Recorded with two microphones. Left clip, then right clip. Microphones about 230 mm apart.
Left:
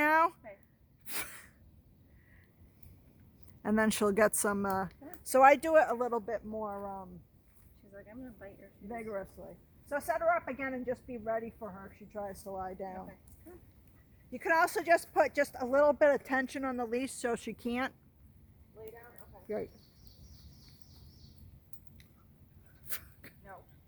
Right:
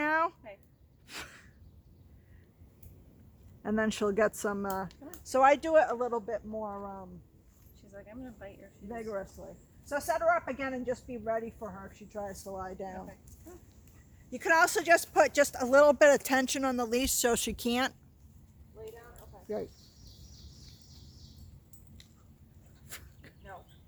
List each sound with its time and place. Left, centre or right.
0.0 s a sound: left
3.6 s a woman's voice: left
4.9 s speech: centre
5.2 s speech: left
7.9 s speech: centre
8.9 s a woman's voice: left
14.3 s speech: centre; by 17.9 s right
18.8 s a sound: left
22.9 s a sound: left